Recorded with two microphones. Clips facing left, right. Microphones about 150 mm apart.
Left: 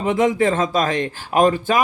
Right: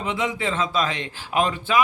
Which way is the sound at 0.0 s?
45° left (ahead or behind).